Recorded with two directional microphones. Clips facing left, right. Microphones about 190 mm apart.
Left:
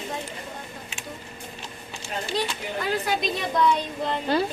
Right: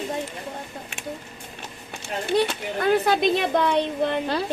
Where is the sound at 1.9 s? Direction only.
55° right (ahead or behind).